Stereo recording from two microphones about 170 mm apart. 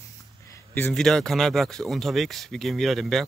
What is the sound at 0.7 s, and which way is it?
Speech, 5° left (ahead or behind).